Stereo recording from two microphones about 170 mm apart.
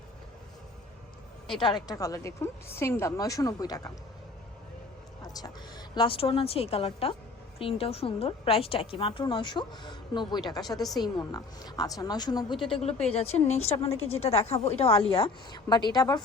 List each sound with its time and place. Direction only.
1.5 s a woman's voice: 25° left (ahead or behind)
5.2 s a woman's voice: 20° left (ahead or behind)
12.7 s a woman's voice: 35° left (ahead or behind)